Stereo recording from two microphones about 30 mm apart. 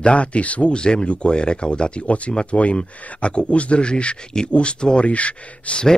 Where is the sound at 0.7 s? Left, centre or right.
Left.